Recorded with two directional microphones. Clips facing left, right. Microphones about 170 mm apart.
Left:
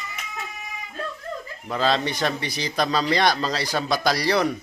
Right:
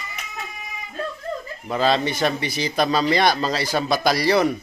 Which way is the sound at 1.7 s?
10° right (ahead or behind).